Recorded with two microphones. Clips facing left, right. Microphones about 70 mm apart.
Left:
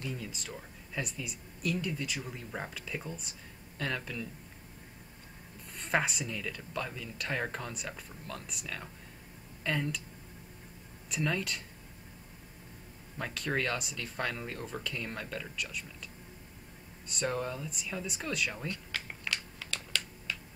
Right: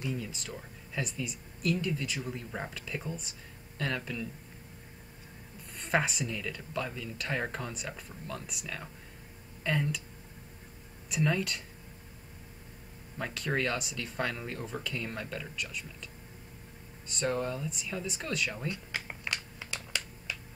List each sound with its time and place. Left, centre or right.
0.1 s speech: centre
5.8 s speech: centre
11.1 s speech: centre
13.2 s speech: centre
17.1 s speech: centre
18.7 s a sound: centre